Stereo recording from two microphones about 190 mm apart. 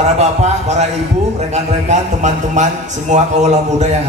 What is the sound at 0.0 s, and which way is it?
A man's voice, 35° right (ahead or behind).